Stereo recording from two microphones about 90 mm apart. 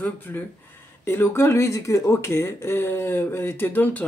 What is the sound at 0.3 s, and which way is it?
Speech, 25° left (ahead or behind).